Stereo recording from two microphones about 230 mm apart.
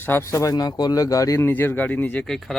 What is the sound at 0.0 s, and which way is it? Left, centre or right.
Speech, centre.